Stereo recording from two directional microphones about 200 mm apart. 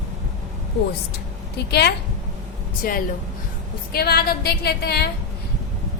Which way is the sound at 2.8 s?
45° left (ahead or behind).